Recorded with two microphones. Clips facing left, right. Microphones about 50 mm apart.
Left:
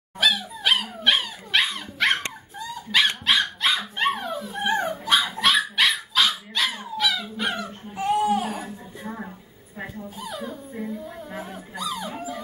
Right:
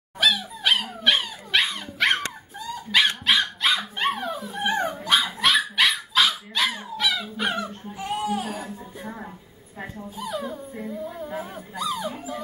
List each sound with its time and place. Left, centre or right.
0.2 s dog: centre
7.9 s baby cry: left
8.6 s a sound: centre
9.8 s dog: centre